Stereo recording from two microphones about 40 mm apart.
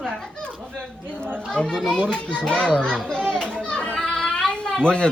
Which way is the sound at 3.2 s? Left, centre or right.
Left.